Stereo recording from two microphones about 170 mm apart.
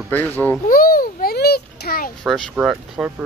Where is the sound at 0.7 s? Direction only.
60° left (ahead or behind).